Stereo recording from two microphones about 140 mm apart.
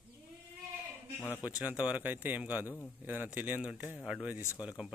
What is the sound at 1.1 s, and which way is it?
Speech, 15° left (ahead or behind).